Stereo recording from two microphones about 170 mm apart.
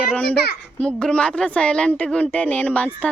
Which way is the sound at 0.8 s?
5° left (ahead or behind).